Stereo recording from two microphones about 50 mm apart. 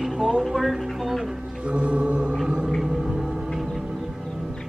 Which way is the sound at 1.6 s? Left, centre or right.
Right.